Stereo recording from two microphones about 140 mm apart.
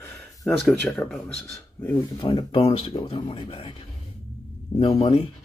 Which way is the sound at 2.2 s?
40° left (ahead or behind).